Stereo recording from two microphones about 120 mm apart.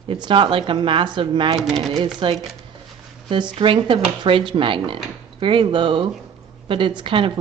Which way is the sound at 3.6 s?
45° right (ahead or behind).